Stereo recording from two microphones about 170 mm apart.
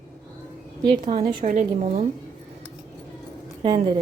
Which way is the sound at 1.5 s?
45° right (ahead or behind).